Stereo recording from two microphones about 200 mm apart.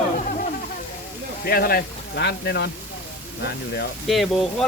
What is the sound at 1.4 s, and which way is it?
Speech, 50° left (ahead or behind).